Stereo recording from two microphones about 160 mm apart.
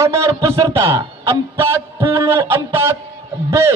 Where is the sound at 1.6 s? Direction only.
15° right (ahead or behind).